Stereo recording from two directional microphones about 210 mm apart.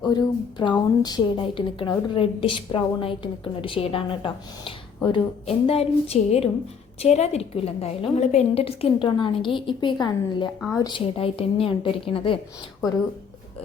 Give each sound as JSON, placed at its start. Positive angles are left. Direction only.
{"t": 0.0, "sound": "a woman's voice", "side_deg": 20}